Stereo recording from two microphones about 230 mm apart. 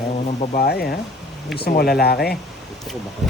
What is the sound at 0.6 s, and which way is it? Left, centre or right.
Speech, left.